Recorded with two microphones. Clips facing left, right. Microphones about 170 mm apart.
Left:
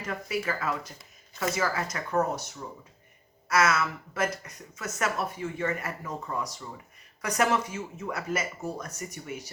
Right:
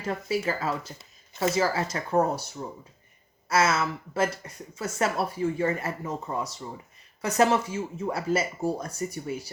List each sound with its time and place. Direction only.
0.0 s speech: 30° right (ahead or behind)